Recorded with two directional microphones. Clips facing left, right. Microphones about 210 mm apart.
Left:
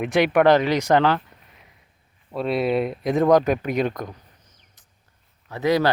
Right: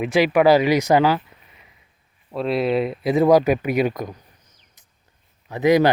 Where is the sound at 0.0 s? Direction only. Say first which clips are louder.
Right 1 dB; centre (ahead or behind).